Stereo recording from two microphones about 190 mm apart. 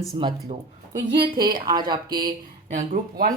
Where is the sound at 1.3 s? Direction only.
20° right (ahead or behind).